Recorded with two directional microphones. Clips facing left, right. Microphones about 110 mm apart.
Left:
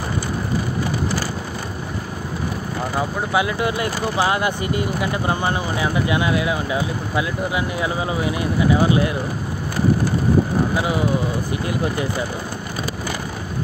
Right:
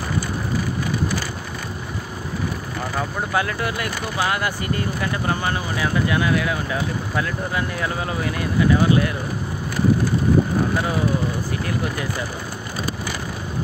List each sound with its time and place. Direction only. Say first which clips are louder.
3.0 s speech: left 2 dB; 15° left (ahead or behind)
11.6 s speech: left 4 dB; 20° left (ahead or behind)